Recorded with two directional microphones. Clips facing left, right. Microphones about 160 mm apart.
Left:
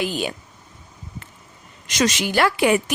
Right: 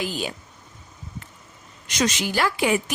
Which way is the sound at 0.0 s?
65° left (ahead or behind).